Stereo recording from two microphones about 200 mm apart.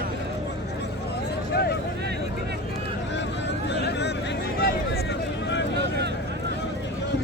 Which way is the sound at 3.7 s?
60° left (ahead or behind).